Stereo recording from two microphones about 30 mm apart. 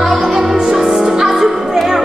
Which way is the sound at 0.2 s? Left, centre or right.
Centre.